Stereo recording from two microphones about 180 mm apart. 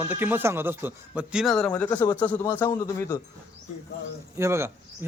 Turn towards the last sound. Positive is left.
turn(degrees=-15)  # may be behind; listen again after turning